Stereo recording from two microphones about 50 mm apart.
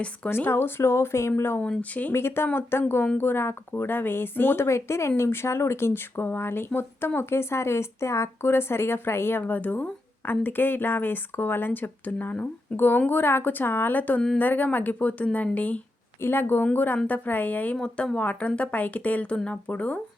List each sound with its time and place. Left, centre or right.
0.3 s speech: left
1.8 s speech: left
2.1 s a woman's voice: left
4.6 s a woman's voice: left
16.2 s a woman's voice: left
17.7 s speech: centre